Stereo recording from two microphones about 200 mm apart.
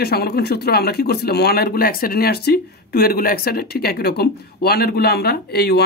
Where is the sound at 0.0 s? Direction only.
50° left (ahead or behind).